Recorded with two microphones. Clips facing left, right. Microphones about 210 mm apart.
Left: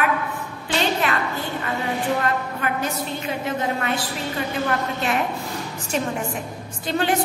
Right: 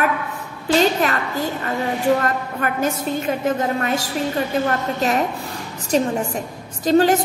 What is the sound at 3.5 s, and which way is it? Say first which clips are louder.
A woman's voice: right 3 dB; 45° right (ahead or behind).